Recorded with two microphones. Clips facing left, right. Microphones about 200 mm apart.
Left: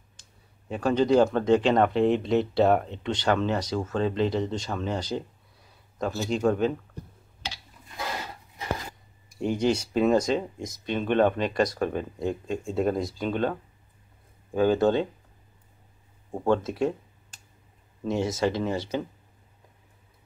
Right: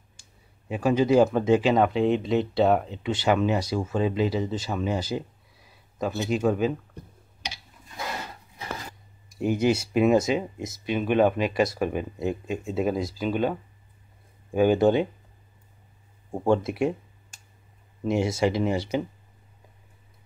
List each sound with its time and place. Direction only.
0.2 s speech: 10° right (ahead or behind)
6.3 s speech: 5° right (ahead or behind)
7.4 s a sound: 15° right (ahead or behind)
9.4 s speech: 5° right (ahead or behind)
16.3 s speech: 10° right (ahead or behind)